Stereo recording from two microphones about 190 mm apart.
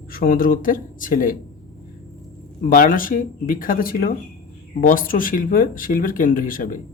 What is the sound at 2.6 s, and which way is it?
Speech, 45° left (ahead or behind).